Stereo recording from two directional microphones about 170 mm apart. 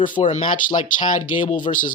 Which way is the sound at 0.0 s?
50° left (ahead or behind).